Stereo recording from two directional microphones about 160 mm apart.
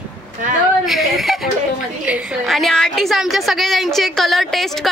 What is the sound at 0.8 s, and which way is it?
A woman's voice, centre (ahead or behind).